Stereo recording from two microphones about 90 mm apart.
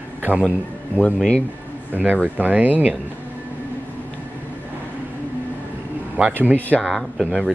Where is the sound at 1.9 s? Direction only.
20° right (ahead or behind).